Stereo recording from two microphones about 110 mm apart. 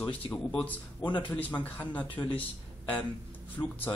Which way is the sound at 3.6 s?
30° left (ahead or behind).